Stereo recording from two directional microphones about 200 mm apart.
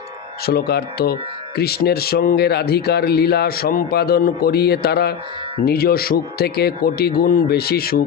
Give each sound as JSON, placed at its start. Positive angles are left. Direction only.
{"t": 0.4, "sound": "speech", "side_deg": 50}